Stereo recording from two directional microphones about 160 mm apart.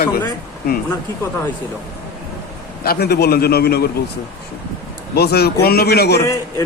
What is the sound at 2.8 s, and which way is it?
A man's voice, 75° left (ahead or behind).